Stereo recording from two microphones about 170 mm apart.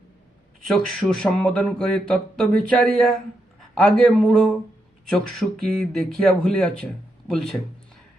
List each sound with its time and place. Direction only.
0.7 s speech: 5° left (ahead or behind)